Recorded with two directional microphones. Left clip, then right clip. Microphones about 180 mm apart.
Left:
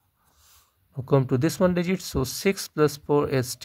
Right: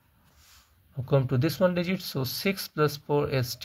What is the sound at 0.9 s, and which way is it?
Speech, 50° left (ahead or behind).